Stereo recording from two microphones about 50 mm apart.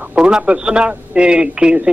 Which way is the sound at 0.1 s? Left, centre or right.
Centre.